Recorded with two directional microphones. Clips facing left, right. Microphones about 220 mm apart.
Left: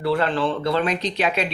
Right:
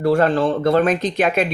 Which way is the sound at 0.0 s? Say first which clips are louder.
Right 5 dB; 45° right (ahead or behind).